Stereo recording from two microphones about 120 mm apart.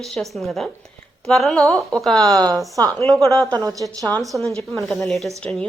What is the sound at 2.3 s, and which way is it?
A woman's voice, 30° right (ahead or behind).